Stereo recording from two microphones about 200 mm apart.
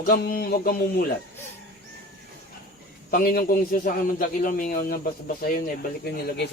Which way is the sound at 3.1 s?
50° left (ahead or behind).